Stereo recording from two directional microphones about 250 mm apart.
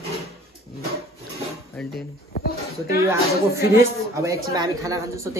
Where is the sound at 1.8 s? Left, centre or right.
Centre.